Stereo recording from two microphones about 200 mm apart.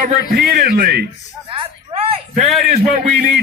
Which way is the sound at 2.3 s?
Centre (ahead or behind).